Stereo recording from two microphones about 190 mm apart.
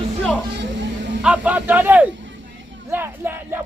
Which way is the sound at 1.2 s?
5° right (ahead or behind).